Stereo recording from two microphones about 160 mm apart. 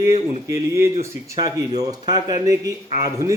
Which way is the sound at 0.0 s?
20° right (ahead or behind).